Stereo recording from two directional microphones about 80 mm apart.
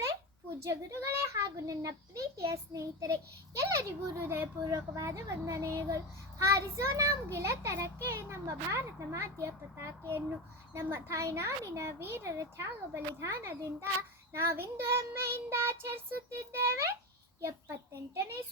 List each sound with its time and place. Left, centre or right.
0.6 s a woman's voice: right
4.7 s a child's voice: right